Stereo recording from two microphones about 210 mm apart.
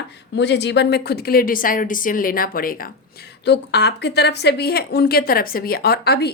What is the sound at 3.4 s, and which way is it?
Speech, 55° left (ahead or behind).